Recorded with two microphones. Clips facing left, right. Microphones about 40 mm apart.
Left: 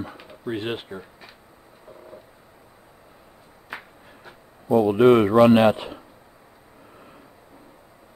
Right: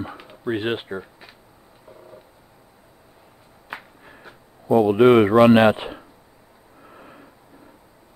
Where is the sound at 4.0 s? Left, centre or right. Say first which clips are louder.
Right 2 dB; centre.